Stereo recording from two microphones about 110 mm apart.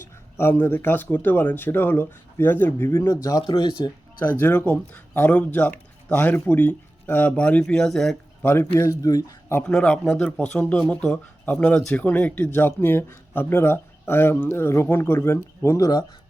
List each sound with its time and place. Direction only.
0.3 s speech: 20° left (ahead or behind)
3.4 s speech: 50° left (ahead or behind)
4.4 s speech: 15° left (ahead or behind)
8.4 s speech: 20° left (ahead or behind)
9.6 s speech: 10° left (ahead or behind); by 16.0 s 30° left (ahead or behind)